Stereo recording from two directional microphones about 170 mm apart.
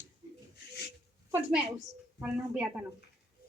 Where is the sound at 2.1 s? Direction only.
5° right (ahead or behind).